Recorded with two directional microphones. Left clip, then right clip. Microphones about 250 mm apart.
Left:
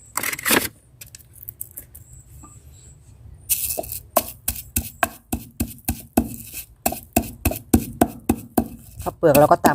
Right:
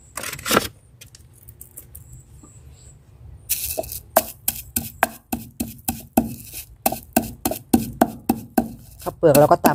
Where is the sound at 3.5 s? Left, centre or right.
Centre.